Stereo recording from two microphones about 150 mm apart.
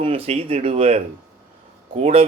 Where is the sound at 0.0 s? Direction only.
40° right (ahead or behind).